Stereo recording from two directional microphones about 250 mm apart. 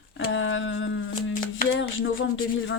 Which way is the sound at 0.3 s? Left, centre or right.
Left.